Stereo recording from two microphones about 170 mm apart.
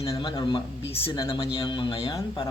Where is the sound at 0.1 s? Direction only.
25° left (ahead or behind).